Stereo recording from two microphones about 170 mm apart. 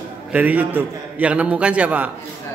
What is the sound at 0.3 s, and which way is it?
A man's voice, 10° right (ahead or behind).